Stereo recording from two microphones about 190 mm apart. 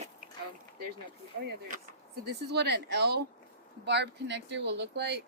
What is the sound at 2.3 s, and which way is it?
Speech, 60° right (ahead or behind).